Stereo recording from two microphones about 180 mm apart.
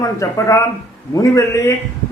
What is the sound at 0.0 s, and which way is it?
A man's voice, 15° left (ahead or behind).